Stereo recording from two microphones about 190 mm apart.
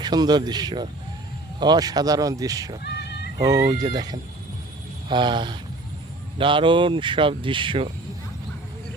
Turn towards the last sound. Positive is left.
turn(degrees=-25)  # may be behind; listen again after turning